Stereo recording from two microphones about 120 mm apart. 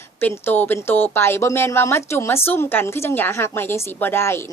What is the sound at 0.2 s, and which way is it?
A woman's voice, 15° left (ahead or behind).